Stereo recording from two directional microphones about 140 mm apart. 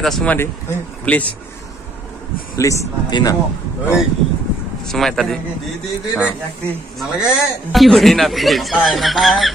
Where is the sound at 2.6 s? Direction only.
25° left (ahead or behind).